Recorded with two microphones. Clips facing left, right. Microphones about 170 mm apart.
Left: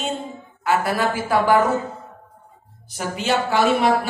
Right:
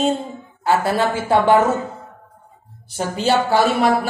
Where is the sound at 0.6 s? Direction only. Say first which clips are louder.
Right 3 dB; 25° right (ahead or behind).